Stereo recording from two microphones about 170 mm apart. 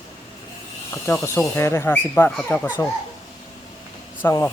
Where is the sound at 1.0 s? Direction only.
15° left (ahead or behind).